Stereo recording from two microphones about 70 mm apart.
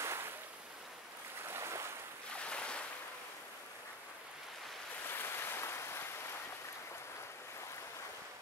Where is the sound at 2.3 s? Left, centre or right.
Centre.